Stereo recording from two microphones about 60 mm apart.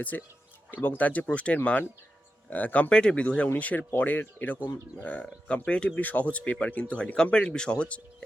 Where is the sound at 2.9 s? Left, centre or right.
Centre.